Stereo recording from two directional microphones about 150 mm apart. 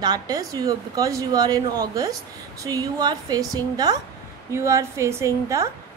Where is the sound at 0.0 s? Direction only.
25° right (ahead or behind).